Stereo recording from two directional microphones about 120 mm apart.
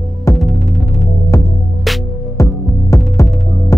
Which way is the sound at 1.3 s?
25° left (ahead or behind).